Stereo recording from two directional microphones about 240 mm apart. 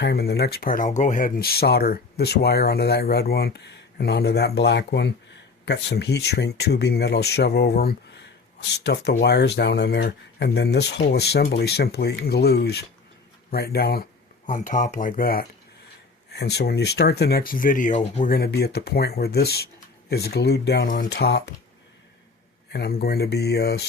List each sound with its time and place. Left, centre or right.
0.0 s speech: left
22.7 s speech: left